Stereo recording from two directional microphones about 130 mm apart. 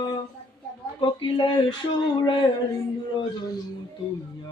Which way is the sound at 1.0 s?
35° left (ahead or behind).